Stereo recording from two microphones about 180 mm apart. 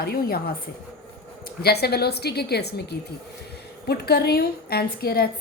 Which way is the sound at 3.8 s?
65° left (ahead or behind).